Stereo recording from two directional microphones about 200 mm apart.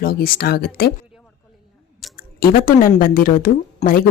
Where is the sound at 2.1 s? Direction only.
45° left (ahead or behind).